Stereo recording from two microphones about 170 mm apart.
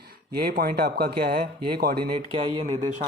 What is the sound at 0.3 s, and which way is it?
Speech, 65° right (ahead or behind).